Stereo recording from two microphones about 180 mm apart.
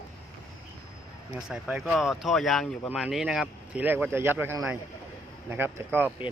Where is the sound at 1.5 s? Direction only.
5° right (ahead or behind).